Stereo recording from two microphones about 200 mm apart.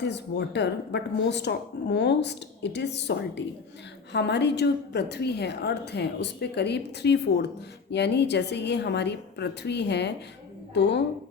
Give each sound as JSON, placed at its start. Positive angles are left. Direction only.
{"t": 0.0, "sound": "a woman's voice", "side_deg": 60}